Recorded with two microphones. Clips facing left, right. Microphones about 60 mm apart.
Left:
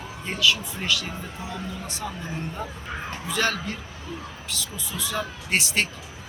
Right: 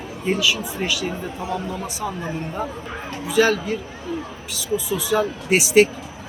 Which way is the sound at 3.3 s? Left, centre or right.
Centre.